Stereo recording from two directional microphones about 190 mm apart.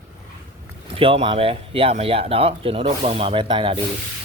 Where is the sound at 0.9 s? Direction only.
30° right (ahead or behind).